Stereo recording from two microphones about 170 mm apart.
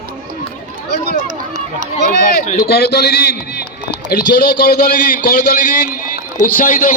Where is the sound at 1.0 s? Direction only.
50° right (ahead or behind).